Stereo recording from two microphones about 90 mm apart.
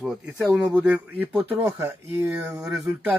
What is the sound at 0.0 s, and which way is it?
A man's voice, 5° right (ahead or behind).